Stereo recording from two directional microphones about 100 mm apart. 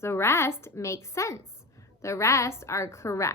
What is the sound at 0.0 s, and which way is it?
A woman's voice, 25° left (ahead or behind).